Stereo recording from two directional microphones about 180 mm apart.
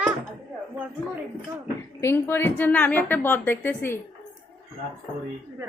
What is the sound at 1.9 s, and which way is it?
A woman's voice, 15° left (ahead or behind).